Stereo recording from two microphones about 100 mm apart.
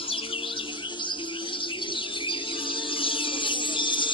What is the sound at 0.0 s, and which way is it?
Music, 65° left (ahead or behind).